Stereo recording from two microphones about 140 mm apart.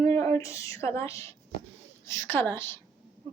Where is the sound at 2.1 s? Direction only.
15° left (ahead or behind).